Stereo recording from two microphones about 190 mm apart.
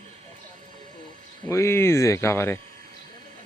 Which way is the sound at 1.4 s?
15° left (ahead or behind).